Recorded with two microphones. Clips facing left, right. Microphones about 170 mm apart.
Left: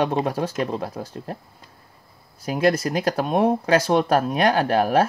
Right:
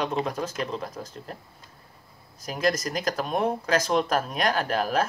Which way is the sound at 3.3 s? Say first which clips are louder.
Left 6 dB; 30° left (ahead or behind).